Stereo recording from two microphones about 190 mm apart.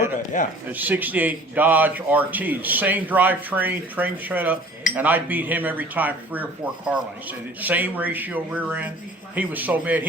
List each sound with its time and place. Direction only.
0.3 s speech: 40° left (ahead or behind)
0.7 s speech: 10° right (ahead or behind)